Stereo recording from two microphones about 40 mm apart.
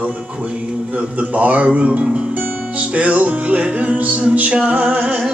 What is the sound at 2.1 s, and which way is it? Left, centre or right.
Music, right.